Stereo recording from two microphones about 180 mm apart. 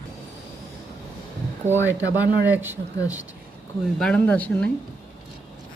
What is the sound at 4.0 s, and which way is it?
Speech, 5° left (ahead or behind).